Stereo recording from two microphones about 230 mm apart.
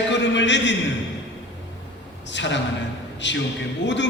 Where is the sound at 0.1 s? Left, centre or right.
Left.